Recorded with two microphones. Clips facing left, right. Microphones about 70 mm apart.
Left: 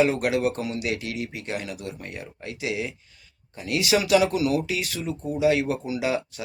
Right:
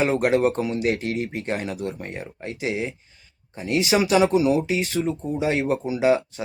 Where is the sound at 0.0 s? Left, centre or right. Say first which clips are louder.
Right 2 dB; right.